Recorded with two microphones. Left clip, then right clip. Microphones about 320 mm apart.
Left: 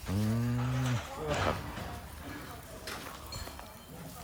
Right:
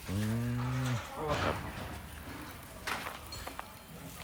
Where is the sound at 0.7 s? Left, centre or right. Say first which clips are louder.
Left 1 dB; left.